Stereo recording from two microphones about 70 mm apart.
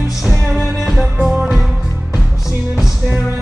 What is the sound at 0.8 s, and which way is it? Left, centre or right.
Music, centre.